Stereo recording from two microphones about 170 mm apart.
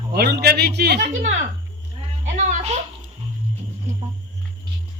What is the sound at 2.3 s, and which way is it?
Music, 45° right (ahead or behind).